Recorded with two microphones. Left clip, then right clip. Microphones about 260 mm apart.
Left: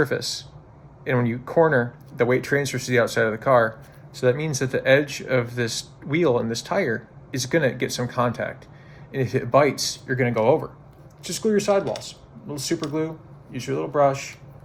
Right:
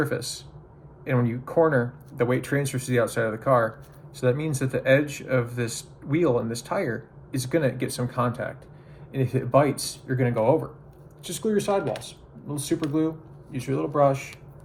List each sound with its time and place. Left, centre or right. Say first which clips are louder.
0.0 s speech: left 4 dB; centre